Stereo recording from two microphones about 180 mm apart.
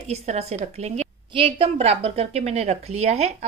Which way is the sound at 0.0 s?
35° right (ahead or behind).